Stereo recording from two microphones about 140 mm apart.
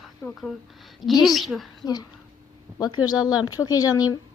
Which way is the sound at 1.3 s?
Centre (ahead or behind).